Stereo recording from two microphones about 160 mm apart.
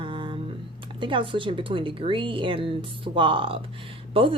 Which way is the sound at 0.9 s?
30° right (ahead or behind).